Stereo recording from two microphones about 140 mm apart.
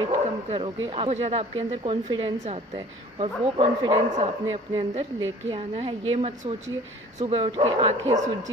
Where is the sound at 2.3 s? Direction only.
55° right (ahead or behind).